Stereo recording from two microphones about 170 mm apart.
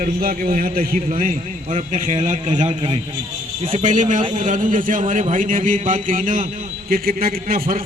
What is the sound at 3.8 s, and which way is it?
A man's voice, 45° right (ahead or behind).